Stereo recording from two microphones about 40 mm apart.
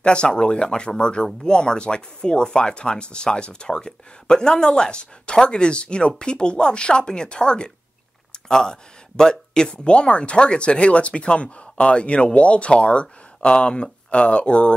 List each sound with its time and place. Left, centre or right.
0.0 s speech: left